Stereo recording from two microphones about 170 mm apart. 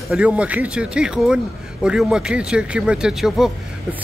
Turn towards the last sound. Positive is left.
turn(degrees=-5)  # may be behind; listen again after turning